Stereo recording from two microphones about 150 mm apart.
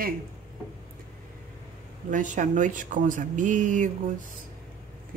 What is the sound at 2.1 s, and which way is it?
Speech, 60° right (ahead or behind).